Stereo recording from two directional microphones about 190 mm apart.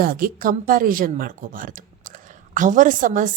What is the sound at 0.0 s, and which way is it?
A woman's voice, 50° right (ahead or behind).